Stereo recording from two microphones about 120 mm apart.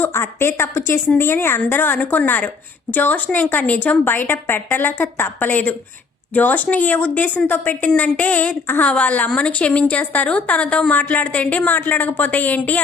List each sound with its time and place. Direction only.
0.0 s a woman's voice: 20° left (ahead or behind)